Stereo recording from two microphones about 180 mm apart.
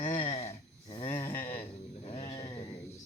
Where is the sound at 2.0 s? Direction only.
30° left (ahead or behind).